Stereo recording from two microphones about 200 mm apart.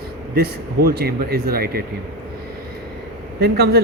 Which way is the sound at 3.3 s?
55° right (ahead or behind).